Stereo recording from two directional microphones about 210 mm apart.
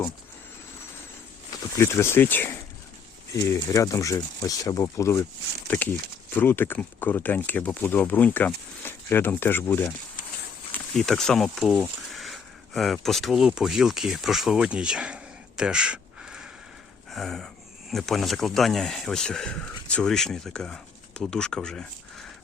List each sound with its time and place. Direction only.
1.8 s speech: 10° left (ahead or behind); by 16.5 s 5° right (ahead or behind)
17.1 s gasp: centre (ahead or behind)
17.9 s speech: centre (ahead or behind)